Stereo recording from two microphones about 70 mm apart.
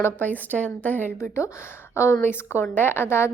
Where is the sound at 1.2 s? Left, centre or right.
Left.